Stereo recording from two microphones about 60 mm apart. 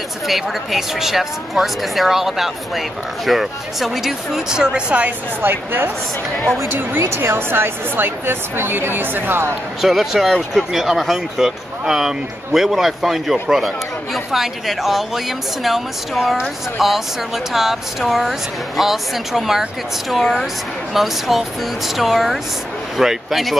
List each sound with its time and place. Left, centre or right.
0.3 s speech: centre
5.4 s speech: right
6.9 s speech: right
9.8 s speech: centre